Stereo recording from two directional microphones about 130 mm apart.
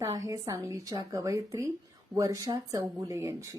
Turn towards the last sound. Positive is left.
turn(degrees=-25)  # may be behind; listen again after turning